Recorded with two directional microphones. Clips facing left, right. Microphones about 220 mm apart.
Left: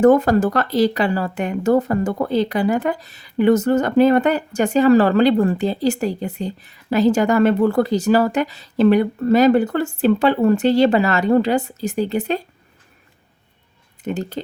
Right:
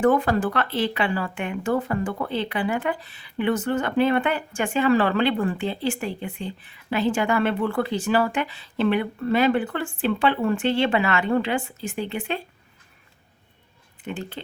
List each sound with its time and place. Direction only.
0.0 s speech: 40° left (ahead or behind)
14.0 s speech: 40° left (ahead or behind)